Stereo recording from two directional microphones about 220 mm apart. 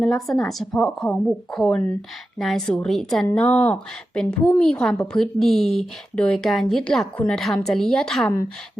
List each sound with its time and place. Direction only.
0.0 s a woman's voice: centre (ahead or behind)